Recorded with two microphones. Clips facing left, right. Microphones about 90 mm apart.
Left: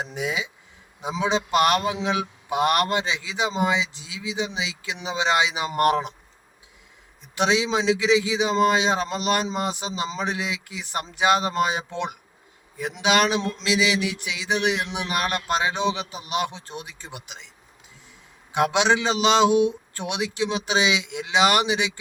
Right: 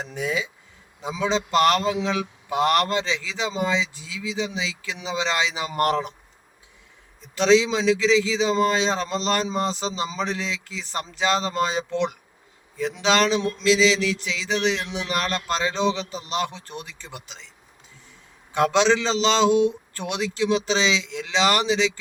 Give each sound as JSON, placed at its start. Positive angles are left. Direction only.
{"t": 0.0, "sound": "speech", "side_deg": 15}
{"t": 7.3, "sound": "speech", "side_deg": 15}
{"t": 18.5, "sound": "speech", "side_deg": 15}